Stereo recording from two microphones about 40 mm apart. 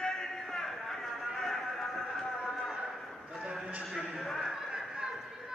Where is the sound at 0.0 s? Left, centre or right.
Centre.